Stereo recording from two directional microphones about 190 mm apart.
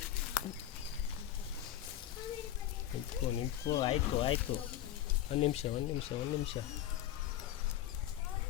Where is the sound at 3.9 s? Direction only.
30° left (ahead or behind).